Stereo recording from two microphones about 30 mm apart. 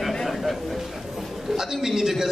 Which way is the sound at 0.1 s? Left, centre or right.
Centre.